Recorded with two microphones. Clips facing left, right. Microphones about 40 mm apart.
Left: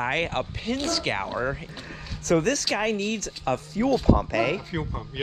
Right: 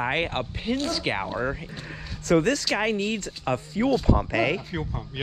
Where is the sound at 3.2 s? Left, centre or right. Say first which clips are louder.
Even; right.